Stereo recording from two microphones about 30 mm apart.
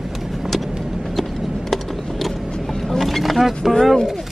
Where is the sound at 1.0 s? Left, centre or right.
Centre.